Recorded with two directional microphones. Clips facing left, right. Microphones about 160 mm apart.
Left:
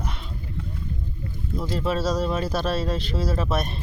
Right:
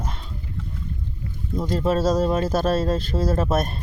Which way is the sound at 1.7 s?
45° right (ahead or behind).